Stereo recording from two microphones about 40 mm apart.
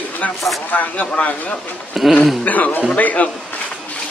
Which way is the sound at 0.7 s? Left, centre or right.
Left.